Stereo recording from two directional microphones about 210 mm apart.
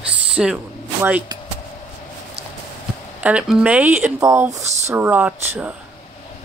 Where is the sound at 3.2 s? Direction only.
5° right (ahead or behind).